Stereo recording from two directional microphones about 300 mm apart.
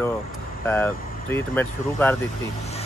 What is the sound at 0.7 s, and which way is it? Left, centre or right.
Speech, centre.